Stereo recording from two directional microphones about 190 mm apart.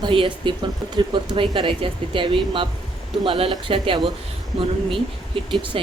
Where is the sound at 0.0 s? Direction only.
25° right (ahead or behind).